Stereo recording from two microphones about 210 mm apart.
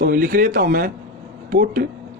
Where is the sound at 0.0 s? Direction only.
40° right (ahead or behind).